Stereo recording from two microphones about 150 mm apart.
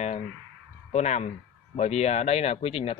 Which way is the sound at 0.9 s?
50° left (ahead or behind).